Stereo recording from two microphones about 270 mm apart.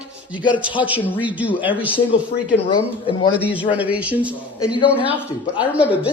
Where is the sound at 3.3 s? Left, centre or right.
Centre.